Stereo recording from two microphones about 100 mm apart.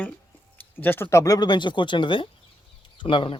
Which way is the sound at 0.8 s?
20° left (ahead or behind).